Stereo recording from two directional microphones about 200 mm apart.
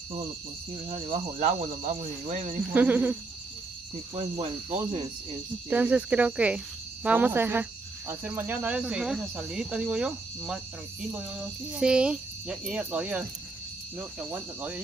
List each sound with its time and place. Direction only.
0.8 s speech: 30° right (ahead or behind)
2.7 s cricket: 10° right (ahead or behind)
4.1 s cricket: 25° right (ahead or behind)
5.7 s cricket: 10° right (ahead or behind)
8.1 s speech: 10° right (ahead or behind)
13.9 s cricket: 10° right (ahead or behind)